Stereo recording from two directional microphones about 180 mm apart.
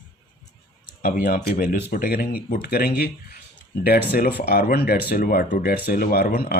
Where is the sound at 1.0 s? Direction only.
50° left (ahead or behind).